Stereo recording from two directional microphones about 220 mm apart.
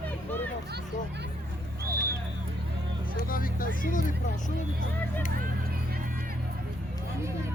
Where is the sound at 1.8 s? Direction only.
45° right (ahead or behind).